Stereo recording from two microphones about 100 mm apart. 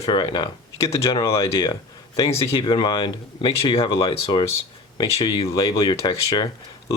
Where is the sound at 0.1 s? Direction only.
50° left (ahead or behind).